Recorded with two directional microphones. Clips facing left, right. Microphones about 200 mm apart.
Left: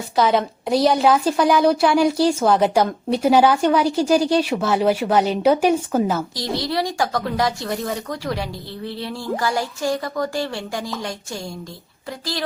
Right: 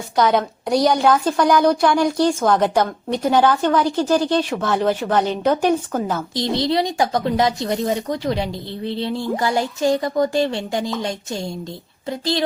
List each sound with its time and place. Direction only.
0.2 s a woman's voice: 5° left (ahead or behind)
6.3 s a woman's voice: 25° right (ahead or behind)